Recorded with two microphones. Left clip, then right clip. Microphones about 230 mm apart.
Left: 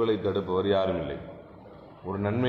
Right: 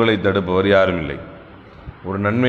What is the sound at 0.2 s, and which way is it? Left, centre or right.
Speech, right.